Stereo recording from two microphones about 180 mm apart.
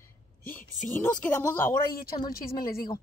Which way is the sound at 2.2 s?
55° left (ahead or behind).